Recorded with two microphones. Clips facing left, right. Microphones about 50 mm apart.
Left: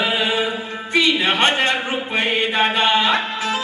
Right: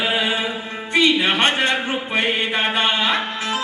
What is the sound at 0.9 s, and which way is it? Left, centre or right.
Music, right.